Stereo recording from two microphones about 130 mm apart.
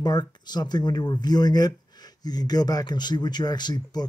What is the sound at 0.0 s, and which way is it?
Speech, 30° left (ahead or behind).